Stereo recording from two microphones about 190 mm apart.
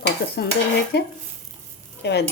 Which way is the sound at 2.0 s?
65° left (ahead or behind).